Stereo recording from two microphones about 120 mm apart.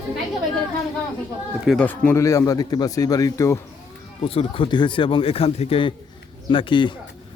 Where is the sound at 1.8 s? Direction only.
15° left (ahead or behind).